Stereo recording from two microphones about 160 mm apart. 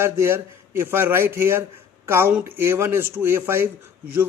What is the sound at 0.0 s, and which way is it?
A man's voice, 15° right (ahead or behind).